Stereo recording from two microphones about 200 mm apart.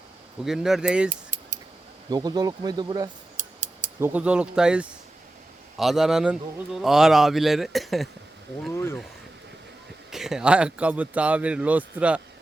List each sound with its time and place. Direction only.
0.4 s a man's voice: centre (ahead or behind)
1.1 s keys jangling: 40° right (ahead or behind)
2.0 s speech: 20° right (ahead or behind)
3.4 s scissors: 40° right (ahead or behind)
4.0 s a man's voice: 5° right (ahead or behind)
8.7 s speech: 10° left (ahead or behind)
10.1 s speech: centre (ahead or behind)